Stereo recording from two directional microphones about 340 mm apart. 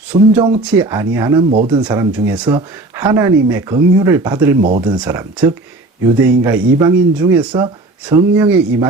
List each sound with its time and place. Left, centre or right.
0.1 s speech: centre
1.8 s speech: centre